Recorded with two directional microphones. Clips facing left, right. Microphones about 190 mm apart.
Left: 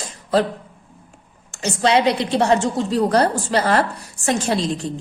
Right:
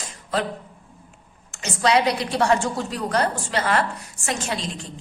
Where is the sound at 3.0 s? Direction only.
35° left (ahead or behind).